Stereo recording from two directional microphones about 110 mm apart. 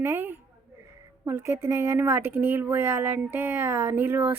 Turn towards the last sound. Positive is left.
turn(degrees=-20)  # may be behind; listen again after turning